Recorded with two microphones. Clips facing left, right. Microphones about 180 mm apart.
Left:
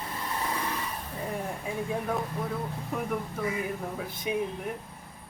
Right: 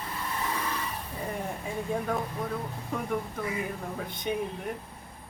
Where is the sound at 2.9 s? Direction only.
5° left (ahead or behind).